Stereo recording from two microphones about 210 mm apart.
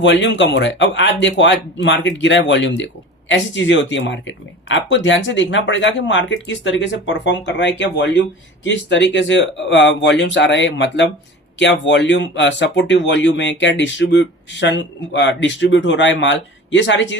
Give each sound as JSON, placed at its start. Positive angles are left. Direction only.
{"t": 0.0, "sound": "speech", "side_deg": 60}